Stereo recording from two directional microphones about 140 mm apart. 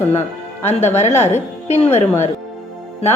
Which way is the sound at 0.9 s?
50° left (ahead or behind).